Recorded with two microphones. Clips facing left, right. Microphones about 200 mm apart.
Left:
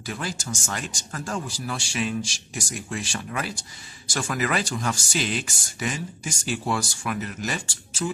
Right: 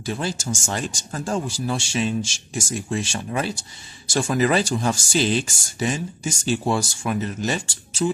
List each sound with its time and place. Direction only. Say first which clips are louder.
0.0 s speech: right 5 dB; 30° right (ahead or behind)